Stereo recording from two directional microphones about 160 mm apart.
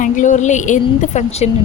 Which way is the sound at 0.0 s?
50° left (ahead or behind).